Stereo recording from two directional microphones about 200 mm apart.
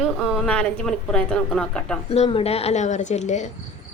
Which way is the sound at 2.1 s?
30° left (ahead or behind).